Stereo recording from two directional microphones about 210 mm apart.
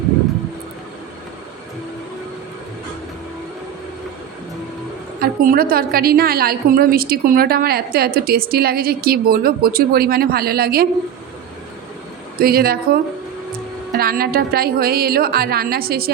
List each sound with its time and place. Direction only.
5.2 s a woman's voice: 45° right (ahead or behind)
12.4 s a woman's voice: 45° right (ahead or behind)